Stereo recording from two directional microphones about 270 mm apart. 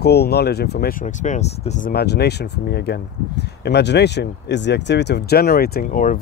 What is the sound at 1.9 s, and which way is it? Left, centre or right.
Speech, left.